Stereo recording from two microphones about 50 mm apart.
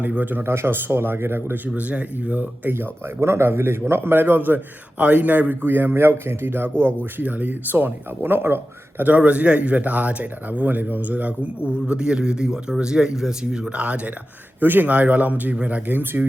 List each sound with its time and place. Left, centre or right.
0.1 s speech: right
0.5 s speech: right
1.6 s speech: right
2.4 s speech: right
3.2 s speech: right
4.9 s speech: right
5.6 s speech: right
9.0 s speech: right
14.6 s speech: right
15.9 s speech: right